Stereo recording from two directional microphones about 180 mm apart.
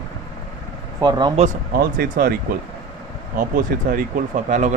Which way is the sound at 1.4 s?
35° right (ahead or behind).